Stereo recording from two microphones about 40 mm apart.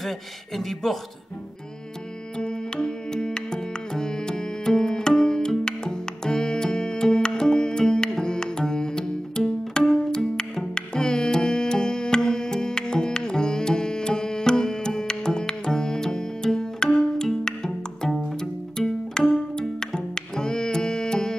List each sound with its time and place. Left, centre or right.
0.6 s speech: centre
2.3 s music: centre
10.7 s carnatic music: centre
18.4 s pizzicato: centre
19.6 s music: centre